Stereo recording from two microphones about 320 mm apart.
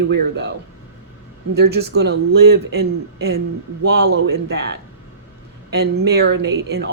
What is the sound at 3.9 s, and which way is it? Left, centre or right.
Speech, right.